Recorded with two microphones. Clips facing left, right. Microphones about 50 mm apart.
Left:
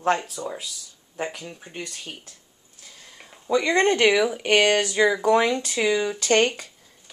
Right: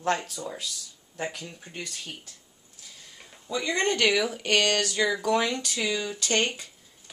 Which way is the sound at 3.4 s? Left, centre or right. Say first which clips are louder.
Left 7 dB; left.